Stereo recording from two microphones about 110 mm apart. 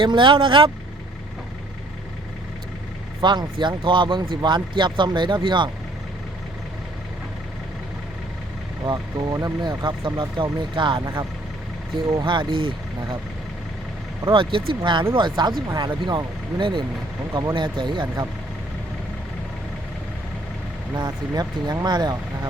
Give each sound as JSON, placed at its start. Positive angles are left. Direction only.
{"t": 0.0, "sound": "speech", "side_deg": -50}
{"t": 3.2, "sound": "speech", "side_deg": -45}
{"t": 8.8, "sound": "speech", "side_deg": -40}
{"t": 12.2, "sound": "speech", "side_deg": -45}
{"t": 14.3, "sound": "speech", "side_deg": -50}
{"t": 20.9, "sound": "speech", "side_deg": -40}